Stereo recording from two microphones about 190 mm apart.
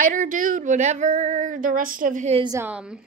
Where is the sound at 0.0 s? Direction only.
45° right (ahead or behind).